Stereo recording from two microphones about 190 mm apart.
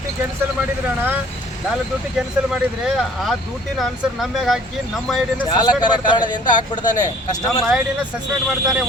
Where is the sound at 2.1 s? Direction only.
Centre (ahead or behind).